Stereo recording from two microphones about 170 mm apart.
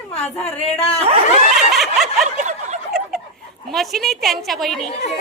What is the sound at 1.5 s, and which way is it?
Speech, centre (ahead or behind).